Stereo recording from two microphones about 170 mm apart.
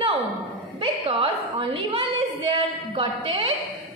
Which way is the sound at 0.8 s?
30° right (ahead or behind).